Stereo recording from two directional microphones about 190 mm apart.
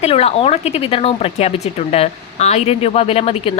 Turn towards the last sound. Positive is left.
turn(degrees=30)  # may be behind; listen again after turning